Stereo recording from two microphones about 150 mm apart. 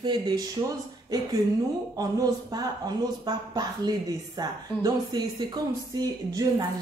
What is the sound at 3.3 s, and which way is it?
Speech, 25° right (ahead or behind).